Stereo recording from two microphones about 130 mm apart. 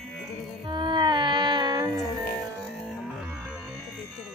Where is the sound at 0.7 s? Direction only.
35° right (ahead or behind).